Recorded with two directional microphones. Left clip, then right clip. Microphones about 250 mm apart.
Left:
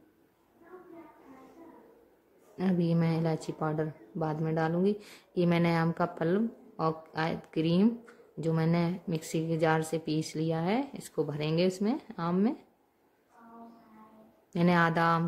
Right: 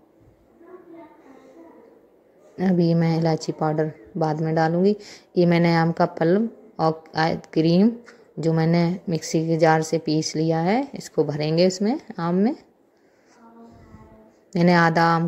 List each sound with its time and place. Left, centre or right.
2.5 s speech: centre
14.5 s speech: centre